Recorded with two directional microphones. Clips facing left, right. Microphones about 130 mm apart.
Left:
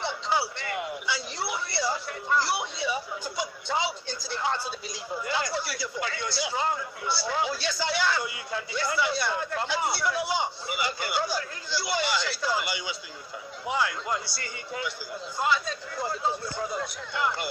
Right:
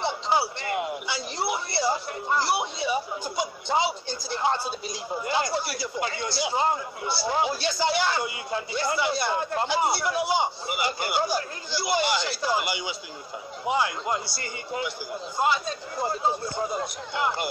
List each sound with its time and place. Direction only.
0.0 s speech: 20° right (ahead or behind)